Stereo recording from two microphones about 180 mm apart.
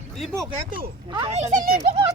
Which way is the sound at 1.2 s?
40° right (ahead or behind).